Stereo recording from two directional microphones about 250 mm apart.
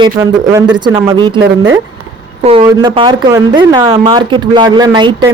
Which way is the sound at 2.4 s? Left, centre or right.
Centre.